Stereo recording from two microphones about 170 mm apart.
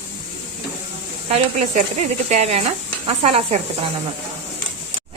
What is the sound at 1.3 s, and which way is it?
Speech, 40° right (ahead or behind).